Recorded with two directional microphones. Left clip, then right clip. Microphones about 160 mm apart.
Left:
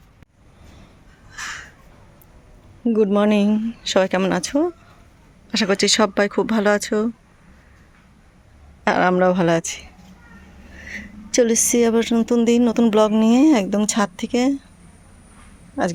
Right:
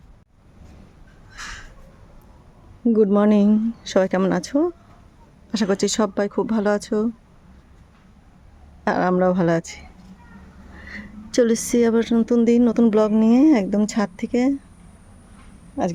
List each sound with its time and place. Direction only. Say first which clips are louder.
2.8 s a woman's voice: even; 20° right (ahead or behind)
8.8 s a woman's voice: left 3 dB; 10° right (ahead or behind)
10.8 s a woman's voice: left 3 dB; 20° right (ahead or behind)
15.8 s speech: left 2 dB; 5° right (ahead or behind)